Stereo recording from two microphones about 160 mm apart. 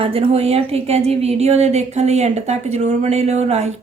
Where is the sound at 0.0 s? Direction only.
35° right (ahead or behind).